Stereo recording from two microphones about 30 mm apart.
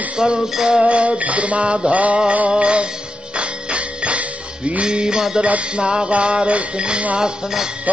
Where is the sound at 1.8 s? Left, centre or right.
Right.